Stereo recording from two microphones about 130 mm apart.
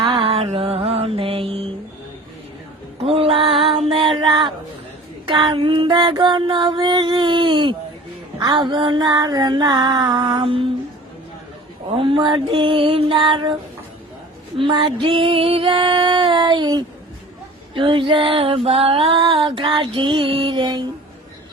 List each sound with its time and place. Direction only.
0.0 s music: 45° right (ahead or behind)
3.0 s female singing: 45° right (ahead or behind)
5.2 s child singing: 35° right (ahead or behind)
8.4 s female singing: 35° right (ahead or behind)
10.4 s female singing: 45° right (ahead or behind)
11.9 s female singing: 45° right (ahead or behind)